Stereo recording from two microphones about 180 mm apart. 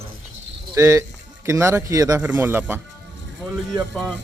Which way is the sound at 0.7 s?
15° right (ahead or behind).